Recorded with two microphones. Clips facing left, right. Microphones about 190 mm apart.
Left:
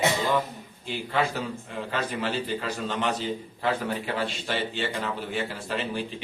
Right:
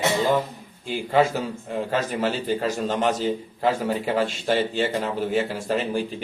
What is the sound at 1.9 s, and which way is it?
A man's voice, 45° right (ahead or behind).